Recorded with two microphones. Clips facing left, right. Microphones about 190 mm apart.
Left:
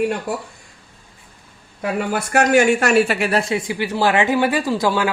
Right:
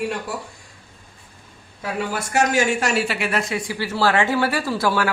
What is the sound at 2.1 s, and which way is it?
Speech, 60° left (ahead or behind).